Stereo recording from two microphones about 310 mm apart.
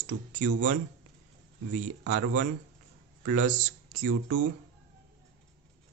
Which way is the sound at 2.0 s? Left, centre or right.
Right.